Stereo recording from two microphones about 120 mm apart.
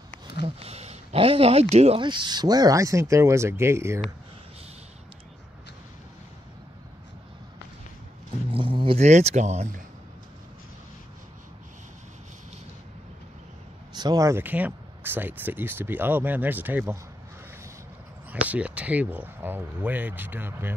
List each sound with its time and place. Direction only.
0.4 s speech: 55° right (ahead or behind)
2.0 s speech: 40° right (ahead or behind); by 4.0 s 20° right (ahead or behind)
8.5 s a sound: 45° right (ahead or behind)
9.0 s speech: 70° right (ahead or behind)
13.9 s speech: 35° right (ahead or behind)
14.4 s speech: 15° right (ahead or behind)
18.3 s speech: 10° right (ahead or behind)